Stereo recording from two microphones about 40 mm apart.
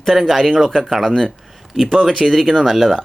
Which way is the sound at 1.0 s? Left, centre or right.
Centre.